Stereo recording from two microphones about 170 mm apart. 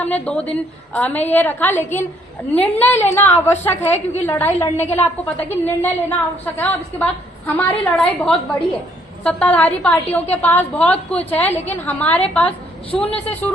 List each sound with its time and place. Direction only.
0.0 s a woman's voice: 10° left (ahead or behind)
3.8 s a woman's voice: 40° left (ahead or behind)
4.3 s a woman's voice: 15° left (ahead or behind)